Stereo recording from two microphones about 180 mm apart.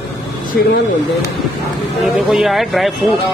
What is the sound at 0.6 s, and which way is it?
Speech, 55° left (ahead or behind).